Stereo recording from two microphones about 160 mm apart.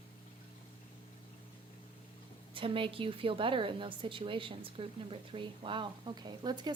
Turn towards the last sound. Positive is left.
turn(degrees=-25)  # may be behind; listen again after turning